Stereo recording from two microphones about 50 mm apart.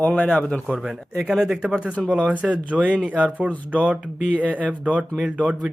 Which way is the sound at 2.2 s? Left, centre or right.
Right.